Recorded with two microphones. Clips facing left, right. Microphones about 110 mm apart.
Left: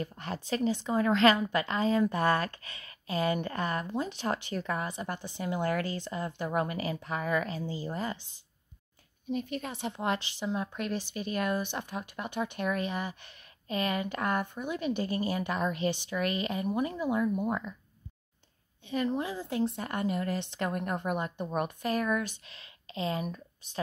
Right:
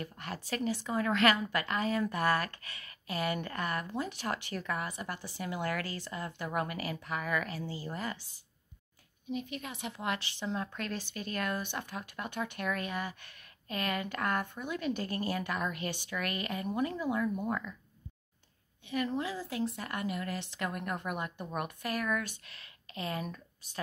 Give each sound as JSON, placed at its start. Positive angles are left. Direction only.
{"t": 0.0, "sound": "a woman's voice", "side_deg": 25}
{"t": 9.3, "sound": "a woman's voice", "side_deg": 40}
{"t": 10.4, "sound": "a woman's voice", "side_deg": 15}
{"t": 18.9, "sound": "a woman's voice", "side_deg": 25}